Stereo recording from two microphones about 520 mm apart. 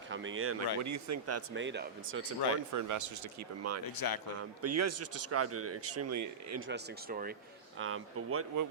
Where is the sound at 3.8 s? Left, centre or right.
Left.